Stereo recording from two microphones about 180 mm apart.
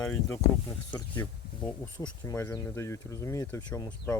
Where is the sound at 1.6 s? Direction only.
25° left (ahead or behind).